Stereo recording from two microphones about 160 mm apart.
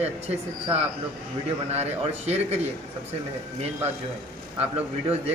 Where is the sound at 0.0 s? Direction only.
40° right (ahead or behind).